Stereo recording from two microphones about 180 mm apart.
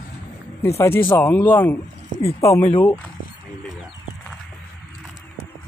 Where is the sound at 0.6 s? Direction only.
15° left (ahead or behind).